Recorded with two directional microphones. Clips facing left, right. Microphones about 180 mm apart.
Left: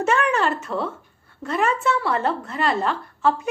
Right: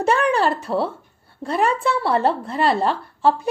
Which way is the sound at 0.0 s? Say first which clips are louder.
Right 2 dB; 35° right (ahead or behind).